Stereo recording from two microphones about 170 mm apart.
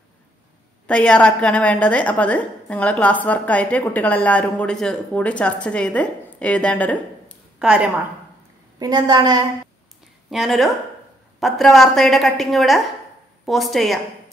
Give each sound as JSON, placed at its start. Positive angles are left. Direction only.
{"t": 0.8, "sound": "a woman's voice", "side_deg": 5}
{"t": 7.5, "sound": "speech", "side_deg": -5}
{"t": 8.7, "sound": "a woman's voice", "side_deg": -25}
{"t": 10.3, "sound": "a woman's voice", "side_deg": 0}